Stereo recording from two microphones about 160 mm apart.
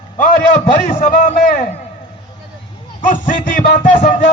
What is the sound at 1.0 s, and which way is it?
Speech, 55° left (ahead or behind).